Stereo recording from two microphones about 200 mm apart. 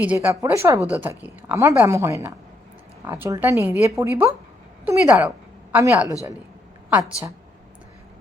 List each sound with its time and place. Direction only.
0.0 s a woman's voice: 10° right (ahead or behind)